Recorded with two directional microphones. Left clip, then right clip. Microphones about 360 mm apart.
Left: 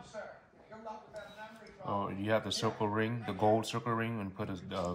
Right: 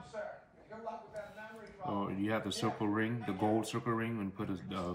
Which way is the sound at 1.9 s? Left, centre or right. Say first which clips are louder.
Left 4 dB; left.